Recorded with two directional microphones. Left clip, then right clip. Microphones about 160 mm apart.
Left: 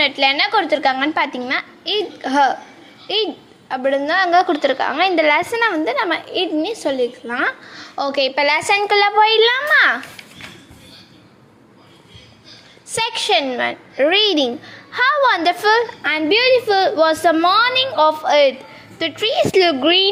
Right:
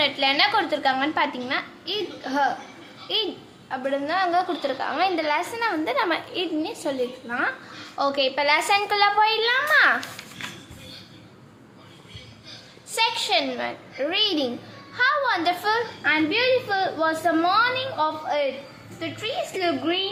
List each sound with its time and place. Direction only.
0.0 s a woman's voice: 40° left (ahead or behind)
5.7 s a woman's voice: 30° left (ahead or behind)
13.0 s a woman's voice: 40° left (ahead or behind); by 20.1 s 55° left (ahead or behind)